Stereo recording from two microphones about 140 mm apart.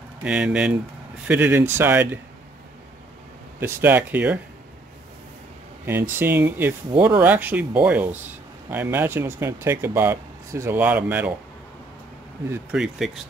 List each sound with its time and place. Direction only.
0.2 s speech: 10° right (ahead or behind)
3.5 s speech: 15° right (ahead or behind)
5.9 s speech: 15° right (ahead or behind)
12.7 s speech: 5° right (ahead or behind)